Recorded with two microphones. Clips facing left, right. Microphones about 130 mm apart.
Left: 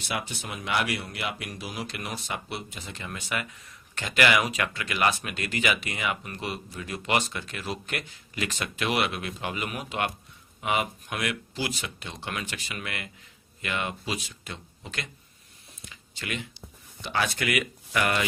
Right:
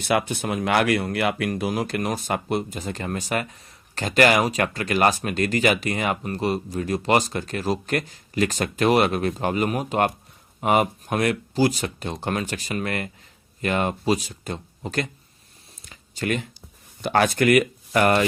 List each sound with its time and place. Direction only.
0.0 s speech: 55° right (ahead or behind)
15.8 s a sound: 40° right (ahead or behind)
17.0 s speech: 50° right (ahead or behind)